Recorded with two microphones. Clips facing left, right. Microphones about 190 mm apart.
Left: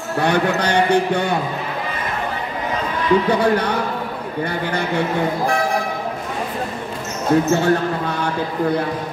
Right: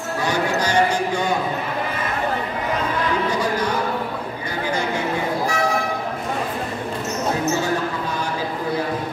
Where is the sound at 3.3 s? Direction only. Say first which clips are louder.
Left 5 dB; 60° left (ahead or behind).